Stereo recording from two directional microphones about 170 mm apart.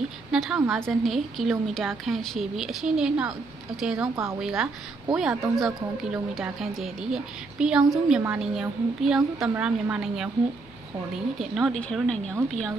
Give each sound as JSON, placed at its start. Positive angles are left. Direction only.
{"t": 0.3, "sound": "a woman's voice", "side_deg": -5}
{"t": 11.3, "sound": "a woman's voice", "side_deg": 0}